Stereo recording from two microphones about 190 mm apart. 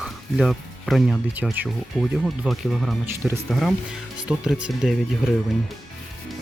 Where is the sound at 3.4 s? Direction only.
Centre (ahead or behind).